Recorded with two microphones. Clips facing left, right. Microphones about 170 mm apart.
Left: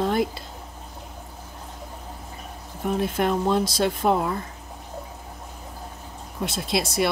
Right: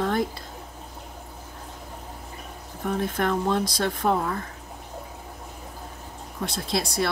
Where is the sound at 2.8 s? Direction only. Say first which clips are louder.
Left 2 dB; 20° left (ahead or behind).